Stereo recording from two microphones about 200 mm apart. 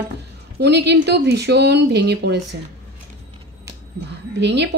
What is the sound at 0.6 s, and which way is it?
A woman's voice, 55° right (ahead or behind).